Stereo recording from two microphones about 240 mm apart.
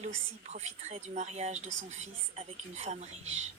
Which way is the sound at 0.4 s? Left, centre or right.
Right.